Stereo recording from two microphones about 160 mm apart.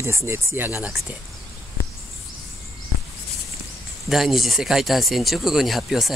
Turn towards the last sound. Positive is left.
turn(degrees=0)  # may be behind; listen again after turning